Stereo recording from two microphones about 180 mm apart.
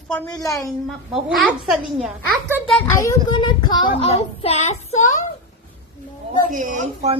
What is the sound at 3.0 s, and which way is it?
A child's voice, 20° left (ahead or behind).